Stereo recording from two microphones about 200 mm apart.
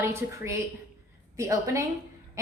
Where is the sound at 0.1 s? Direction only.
15° right (ahead or behind).